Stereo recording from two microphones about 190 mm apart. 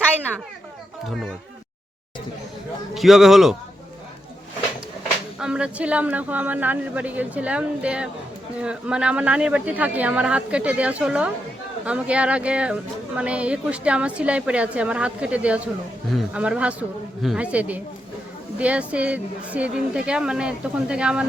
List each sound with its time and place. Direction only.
2.9 s a woman's voice: centre (ahead or behind)
5.4 s a woman's voice: 5° right (ahead or behind)